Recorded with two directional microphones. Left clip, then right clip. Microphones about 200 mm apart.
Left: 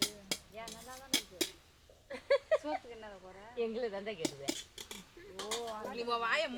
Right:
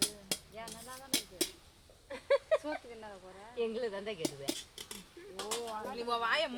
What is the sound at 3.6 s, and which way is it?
Speech, 15° right (ahead or behind).